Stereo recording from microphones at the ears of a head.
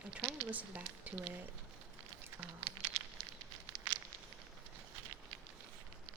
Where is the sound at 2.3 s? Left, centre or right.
Right.